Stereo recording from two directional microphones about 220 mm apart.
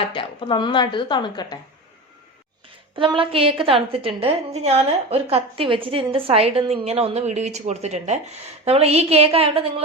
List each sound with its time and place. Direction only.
0.1 s a woman's voice: 20° left (ahead or behind)
2.9 s a woman's voice: 25° right (ahead or behind)